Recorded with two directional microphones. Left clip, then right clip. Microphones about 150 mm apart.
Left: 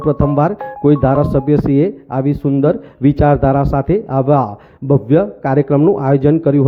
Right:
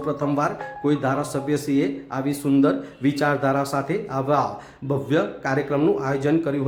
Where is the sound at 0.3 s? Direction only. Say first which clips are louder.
Left 8 dB; 55° left (ahead or behind).